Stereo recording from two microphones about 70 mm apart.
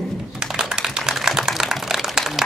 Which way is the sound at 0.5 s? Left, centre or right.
Centre.